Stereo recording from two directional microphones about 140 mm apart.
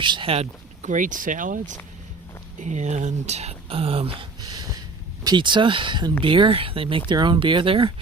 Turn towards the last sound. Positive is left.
turn(degrees=-35)  # may be behind; listen again after turning